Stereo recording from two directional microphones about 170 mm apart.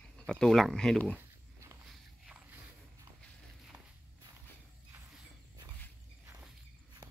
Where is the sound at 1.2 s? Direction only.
15° right (ahead or behind).